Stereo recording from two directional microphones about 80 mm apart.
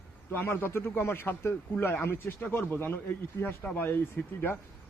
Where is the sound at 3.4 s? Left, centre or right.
Left.